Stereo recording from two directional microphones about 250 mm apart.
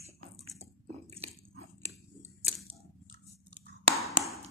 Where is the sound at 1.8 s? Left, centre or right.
Right.